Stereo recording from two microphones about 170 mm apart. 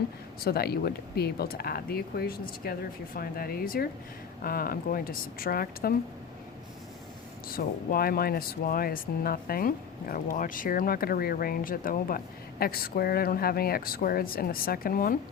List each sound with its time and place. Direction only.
0.3 s speech: 65° left (ahead or behind)
7.4 s speech: 60° left (ahead or behind)